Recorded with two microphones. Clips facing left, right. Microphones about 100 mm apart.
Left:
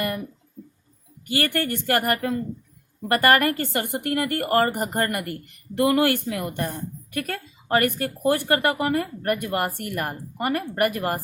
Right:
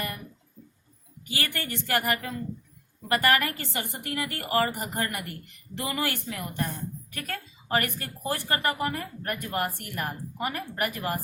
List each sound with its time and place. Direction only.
1.3 s a woman's voice: 55° left (ahead or behind)